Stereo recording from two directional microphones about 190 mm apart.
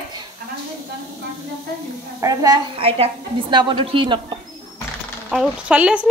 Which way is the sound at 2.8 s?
30° right (ahead or behind).